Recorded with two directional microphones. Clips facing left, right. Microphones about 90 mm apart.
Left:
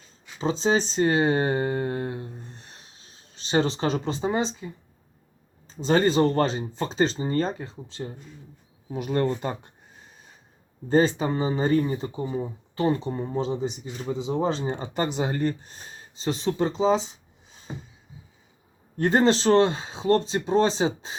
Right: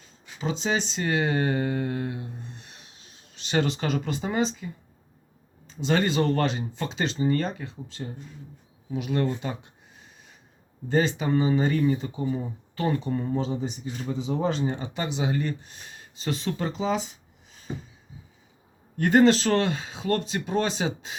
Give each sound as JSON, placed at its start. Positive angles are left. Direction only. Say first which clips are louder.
{"t": 0.3, "sound": "speech", "louder": "left 4 dB", "side_deg": 30}
{"t": 10.8, "sound": "speech", "louder": "left 3 dB", "side_deg": 35}
{"t": 18.9, "sound": "speech", "louder": "right 2 dB", "side_deg": 30}